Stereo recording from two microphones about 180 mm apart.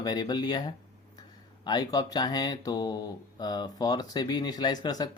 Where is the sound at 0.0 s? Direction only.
20° left (ahead or behind).